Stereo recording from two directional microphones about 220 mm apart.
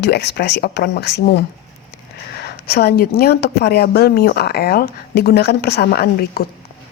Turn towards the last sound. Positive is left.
turn(degrees=45)  # may be behind; listen again after turning